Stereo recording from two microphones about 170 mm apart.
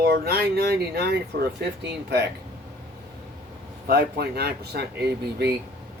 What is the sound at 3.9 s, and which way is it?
Speech, 70° right (ahead or behind).